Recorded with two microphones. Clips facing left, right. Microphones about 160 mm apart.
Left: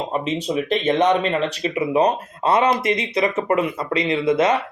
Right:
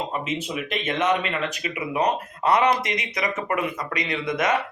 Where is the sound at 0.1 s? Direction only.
30° left (ahead or behind).